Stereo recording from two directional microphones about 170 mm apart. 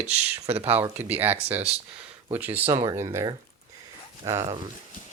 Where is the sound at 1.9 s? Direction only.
10° right (ahead or behind).